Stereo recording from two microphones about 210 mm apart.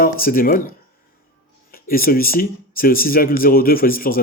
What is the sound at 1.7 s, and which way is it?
Speech, 45° left (ahead or behind).